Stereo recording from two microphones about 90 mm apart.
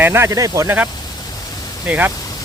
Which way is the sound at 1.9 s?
20° right (ahead or behind).